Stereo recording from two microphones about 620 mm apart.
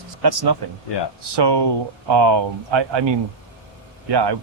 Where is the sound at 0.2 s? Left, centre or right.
Right.